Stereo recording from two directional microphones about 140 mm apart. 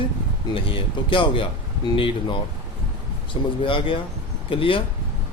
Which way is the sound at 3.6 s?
40° left (ahead or behind).